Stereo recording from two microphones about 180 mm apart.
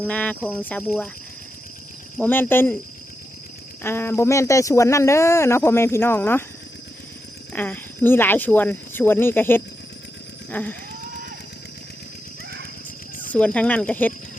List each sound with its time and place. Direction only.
0.0 s speech: 10° left (ahead or behind)
2.1 s speech: 10° left (ahead or behind)
3.8 s speech: 15° left (ahead or behind)
7.5 s speech: 10° left (ahead or behind)
13.3 s speech: 5° left (ahead or behind)